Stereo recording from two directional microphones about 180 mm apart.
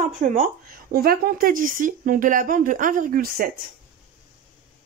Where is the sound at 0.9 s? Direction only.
55° right (ahead or behind).